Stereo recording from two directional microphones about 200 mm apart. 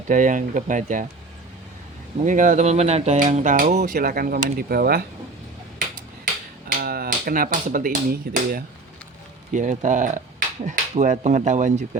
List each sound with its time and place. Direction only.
0.1 s speech: 40° right (ahead or behind)
2.2 s speech: 40° right (ahead or behind)
6.7 s speech: 45° right (ahead or behind)